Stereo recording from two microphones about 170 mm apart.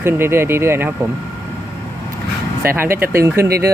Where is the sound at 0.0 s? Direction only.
15° right (ahead or behind).